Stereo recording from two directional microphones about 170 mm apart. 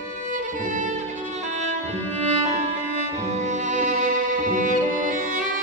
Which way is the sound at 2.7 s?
45° right (ahead or behind).